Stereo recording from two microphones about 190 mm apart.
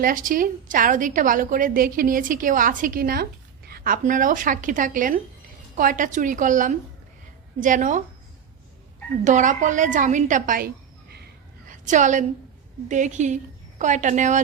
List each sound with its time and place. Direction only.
0.0 s a woman's voice: 45° right (ahead or behind)
9.2 s a woman's voice: 40° right (ahead or behind)
11.7 s a woman's voice: 40° right (ahead or behind)